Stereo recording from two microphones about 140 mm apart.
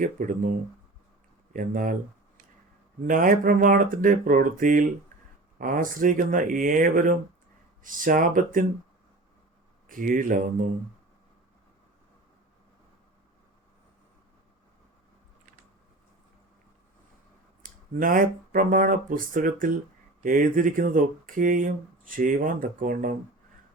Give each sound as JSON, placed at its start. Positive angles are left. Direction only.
{"t": 0.0, "sound": "speech", "side_deg": -70}
{"t": 3.1, "sound": "speech", "side_deg": -75}
{"t": 9.9, "sound": "speech", "side_deg": -75}
{"t": 17.6, "sound": "speech", "side_deg": -80}